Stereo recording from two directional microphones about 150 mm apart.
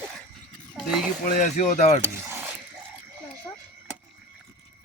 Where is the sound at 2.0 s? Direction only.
15° right (ahead or behind).